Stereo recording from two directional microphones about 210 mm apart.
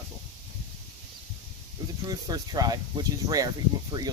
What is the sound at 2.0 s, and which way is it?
Speech, 20° right (ahead or behind).